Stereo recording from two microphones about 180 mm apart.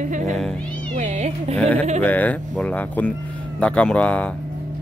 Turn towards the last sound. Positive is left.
turn(degrees=5)  # may be behind; listen again after turning